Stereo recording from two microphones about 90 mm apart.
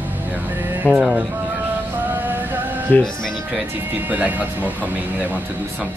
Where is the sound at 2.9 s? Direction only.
15° left (ahead or behind).